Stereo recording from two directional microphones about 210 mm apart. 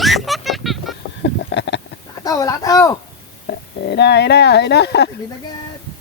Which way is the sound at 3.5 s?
50° left (ahead or behind).